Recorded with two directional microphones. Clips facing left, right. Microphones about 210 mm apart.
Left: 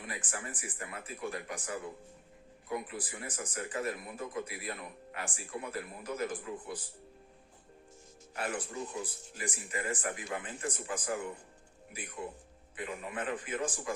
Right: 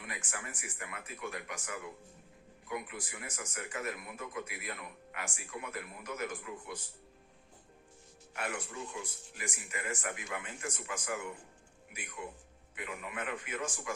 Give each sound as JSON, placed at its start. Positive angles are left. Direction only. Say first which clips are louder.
{"t": 0.0, "sound": "speech", "louder": "left 3 dB", "side_deg": 35}
{"t": 8.4, "sound": "speech", "louder": "left 3 dB", "side_deg": 35}